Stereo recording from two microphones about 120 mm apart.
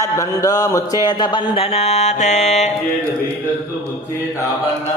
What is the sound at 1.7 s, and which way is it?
Music, 60° left (ahead or behind).